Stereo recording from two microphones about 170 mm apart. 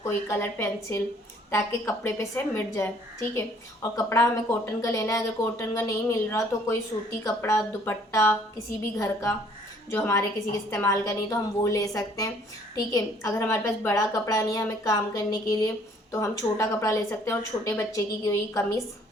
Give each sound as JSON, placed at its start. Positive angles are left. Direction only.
{"t": 0.0, "sound": "speech", "side_deg": 15}
{"t": 2.0, "sound": "a woman's voice", "side_deg": 15}